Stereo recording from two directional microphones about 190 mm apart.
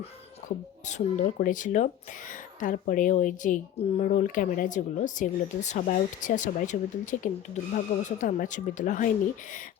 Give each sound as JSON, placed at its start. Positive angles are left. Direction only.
{"t": 0.4, "sound": "speech", "side_deg": 40}